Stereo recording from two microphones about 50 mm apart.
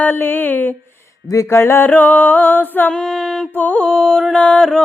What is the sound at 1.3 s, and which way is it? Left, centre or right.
Mantra, left.